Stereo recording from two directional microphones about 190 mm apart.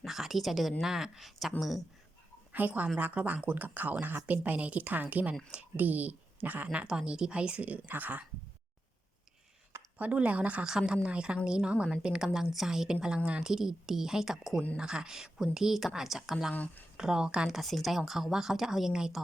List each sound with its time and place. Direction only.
0.0 s a woman's voice: centre (ahead or behind)
9.7 s a woman's voice: 10° right (ahead or behind)